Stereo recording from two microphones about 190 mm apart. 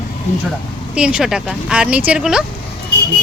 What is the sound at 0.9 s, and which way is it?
Speech, 5° right (ahead or behind).